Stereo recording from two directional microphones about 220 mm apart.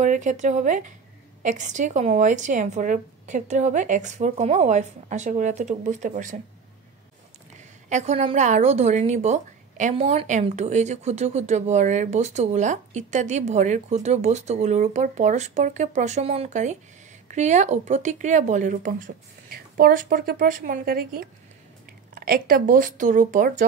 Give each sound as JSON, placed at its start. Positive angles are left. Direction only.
{"t": 0.0, "sound": "a woman's voice", "side_deg": -35}
{"t": 7.5, "sound": "a woman's voice", "side_deg": -30}